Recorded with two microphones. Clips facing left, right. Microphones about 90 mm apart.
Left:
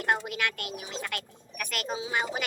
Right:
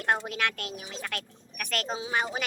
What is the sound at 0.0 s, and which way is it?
Speech, 25° right (ahead or behind).